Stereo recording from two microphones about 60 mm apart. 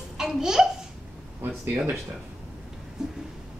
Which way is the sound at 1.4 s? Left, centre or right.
Right.